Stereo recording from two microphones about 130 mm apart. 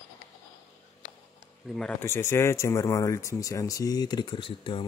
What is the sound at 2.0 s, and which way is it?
Speech, 20° left (ahead or behind).